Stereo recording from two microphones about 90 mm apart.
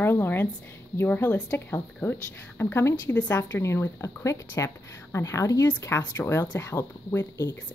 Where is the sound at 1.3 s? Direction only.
15° left (ahead or behind); by 5.7 s 35° left (ahead or behind).